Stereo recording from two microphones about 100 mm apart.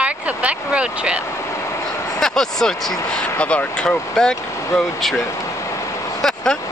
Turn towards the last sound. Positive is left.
turn(degrees=5)  # may be behind; listen again after turning